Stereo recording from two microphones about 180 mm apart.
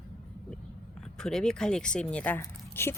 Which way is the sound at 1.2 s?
5° left (ahead or behind).